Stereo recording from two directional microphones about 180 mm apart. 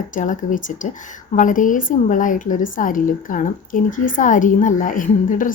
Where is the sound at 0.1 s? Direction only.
45° left (ahead or behind).